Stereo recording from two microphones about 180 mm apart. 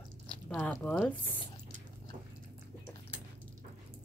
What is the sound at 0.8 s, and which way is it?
Speech, 5° left (ahead or behind).